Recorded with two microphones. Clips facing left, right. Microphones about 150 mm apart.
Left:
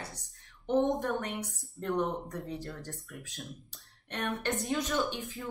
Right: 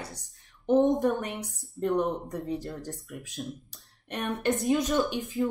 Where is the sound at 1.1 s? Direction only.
20° right (ahead or behind).